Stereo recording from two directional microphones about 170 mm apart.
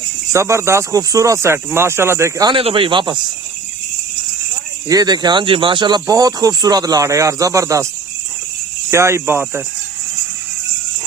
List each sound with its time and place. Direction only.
0.3 s speech: 15° right (ahead or behind)
2.5 s speech: 30° right (ahead or behind)
4.9 s speech: 20° right (ahead or behind)
8.9 s speech: 15° right (ahead or behind)